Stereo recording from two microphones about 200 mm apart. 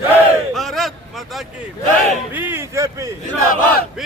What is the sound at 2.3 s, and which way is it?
Speech, 10° right (ahead or behind).